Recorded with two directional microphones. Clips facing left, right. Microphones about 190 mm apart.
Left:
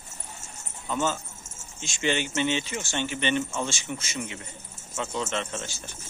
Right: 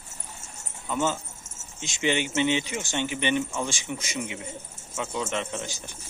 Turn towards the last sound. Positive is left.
turn(degrees=-15)  # may be behind; listen again after turning